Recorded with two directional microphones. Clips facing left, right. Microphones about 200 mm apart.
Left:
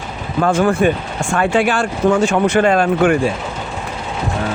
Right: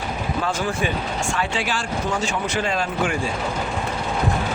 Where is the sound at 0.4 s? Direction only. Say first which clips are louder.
Left 13 dB; 55° left (ahead or behind).